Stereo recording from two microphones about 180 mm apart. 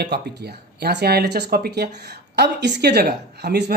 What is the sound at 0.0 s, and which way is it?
A woman's voice, 65° right (ahead or behind).